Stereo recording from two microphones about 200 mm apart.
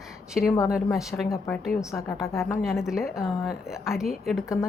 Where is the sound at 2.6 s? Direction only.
Centre (ahead or behind).